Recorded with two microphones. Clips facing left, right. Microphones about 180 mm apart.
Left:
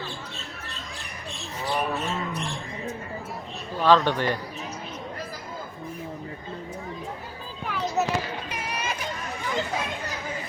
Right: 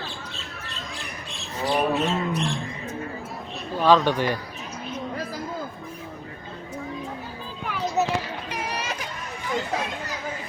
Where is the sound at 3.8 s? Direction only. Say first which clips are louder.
Right 1 dB; 10° right (ahead or behind).